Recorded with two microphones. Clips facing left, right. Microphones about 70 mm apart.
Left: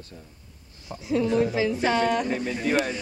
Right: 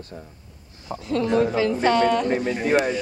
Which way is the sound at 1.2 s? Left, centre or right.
Right.